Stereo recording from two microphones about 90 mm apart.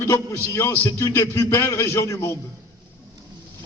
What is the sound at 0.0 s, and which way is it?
A man's voice, 30° left (ahead or behind).